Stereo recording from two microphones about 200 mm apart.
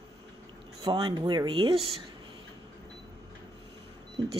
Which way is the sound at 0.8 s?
25° right (ahead or behind).